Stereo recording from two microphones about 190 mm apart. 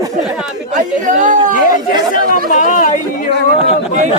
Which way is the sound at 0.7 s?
40° right (ahead or behind).